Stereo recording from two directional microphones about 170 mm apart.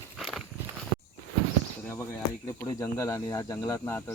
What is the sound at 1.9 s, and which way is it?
Speech, 15° left (ahead or behind).